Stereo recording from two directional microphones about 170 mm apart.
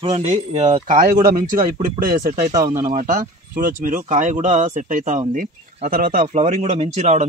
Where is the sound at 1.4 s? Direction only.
55° right (ahead or behind).